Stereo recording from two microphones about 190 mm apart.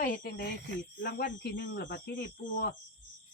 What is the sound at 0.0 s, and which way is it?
Speech, 50° left (ahead or behind).